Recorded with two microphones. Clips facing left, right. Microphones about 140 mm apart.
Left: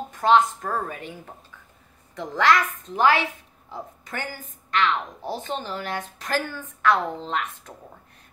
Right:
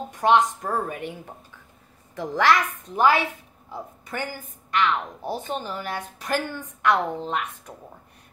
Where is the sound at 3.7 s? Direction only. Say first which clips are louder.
Right 1 dB; 10° right (ahead or behind).